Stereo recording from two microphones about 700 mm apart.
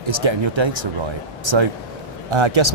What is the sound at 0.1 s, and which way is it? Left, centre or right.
Speech, right.